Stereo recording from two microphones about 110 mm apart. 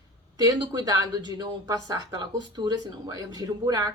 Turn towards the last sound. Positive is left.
turn(degrees=-35)  # may be behind; listen again after turning